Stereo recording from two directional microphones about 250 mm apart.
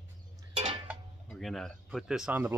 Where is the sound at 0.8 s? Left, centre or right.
Centre.